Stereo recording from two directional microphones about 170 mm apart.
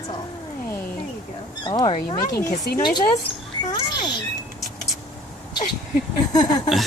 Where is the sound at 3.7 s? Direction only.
25° left (ahead or behind).